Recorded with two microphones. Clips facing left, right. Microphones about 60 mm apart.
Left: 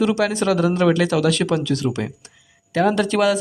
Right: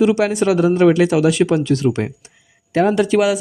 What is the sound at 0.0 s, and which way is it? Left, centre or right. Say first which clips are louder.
Speech: right 4 dB; right.